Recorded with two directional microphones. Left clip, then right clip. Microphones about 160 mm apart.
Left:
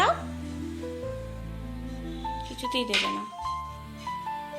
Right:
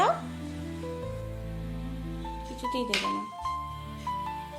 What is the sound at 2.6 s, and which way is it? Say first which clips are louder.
Speech: left 2 dB; 10° right (ahead or behind).